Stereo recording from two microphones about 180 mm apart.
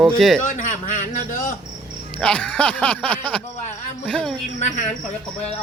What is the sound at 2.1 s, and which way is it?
Speech, 5° left (ahead or behind).